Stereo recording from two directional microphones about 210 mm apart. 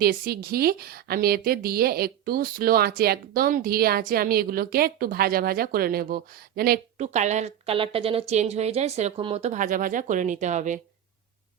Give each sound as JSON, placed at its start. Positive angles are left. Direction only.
{"t": 0.0, "sound": "a woman's voice", "side_deg": -45}
{"t": 7.0, "sound": "a woman's voice", "side_deg": -35}